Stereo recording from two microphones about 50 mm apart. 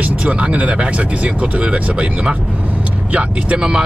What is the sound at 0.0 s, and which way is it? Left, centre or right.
Speech, right.